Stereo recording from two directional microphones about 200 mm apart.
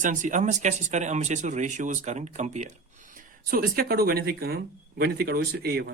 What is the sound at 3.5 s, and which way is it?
Speech, 50° right (ahead or behind).